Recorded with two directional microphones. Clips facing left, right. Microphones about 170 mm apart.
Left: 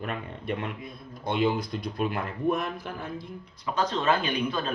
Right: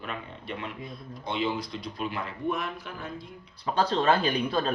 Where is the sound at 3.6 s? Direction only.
35° right (ahead or behind).